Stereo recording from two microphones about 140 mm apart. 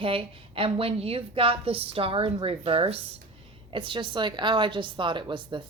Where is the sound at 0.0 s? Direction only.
40° right (ahead or behind).